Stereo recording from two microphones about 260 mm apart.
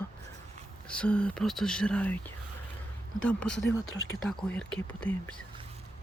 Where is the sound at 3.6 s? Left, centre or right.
Left.